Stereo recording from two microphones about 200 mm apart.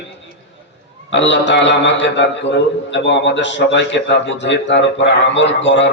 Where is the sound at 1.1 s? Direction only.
65° left (ahead or behind).